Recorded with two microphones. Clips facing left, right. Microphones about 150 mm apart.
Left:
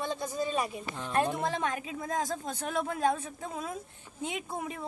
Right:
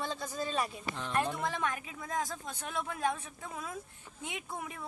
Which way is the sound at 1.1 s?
25° left (ahead or behind).